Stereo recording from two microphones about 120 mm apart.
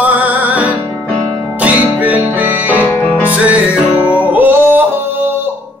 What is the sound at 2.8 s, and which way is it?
Music, 15° left (ahead or behind).